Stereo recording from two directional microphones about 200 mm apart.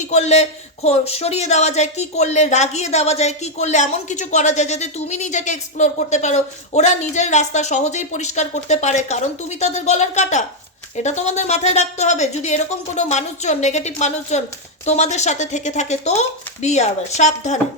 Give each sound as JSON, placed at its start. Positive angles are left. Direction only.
{"t": 0.0, "sound": "a man's voice", "side_deg": 35}